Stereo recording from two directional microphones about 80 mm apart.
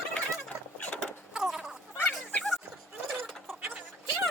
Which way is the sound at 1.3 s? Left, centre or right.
Centre.